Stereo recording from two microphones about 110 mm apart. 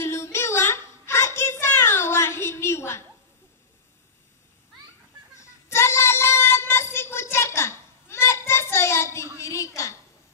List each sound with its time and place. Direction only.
0.0 s child singing: 25° left (ahead or behind)
5.4 s child singing: 25° left (ahead or behind)
9.4 s a sound: 25° left (ahead or behind)